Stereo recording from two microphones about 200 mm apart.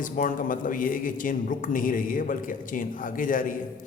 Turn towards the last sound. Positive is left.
turn(degrees=40)  # may be behind; listen again after turning